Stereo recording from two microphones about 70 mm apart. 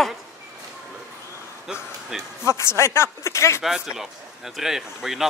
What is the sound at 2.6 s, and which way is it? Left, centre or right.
Speech, left.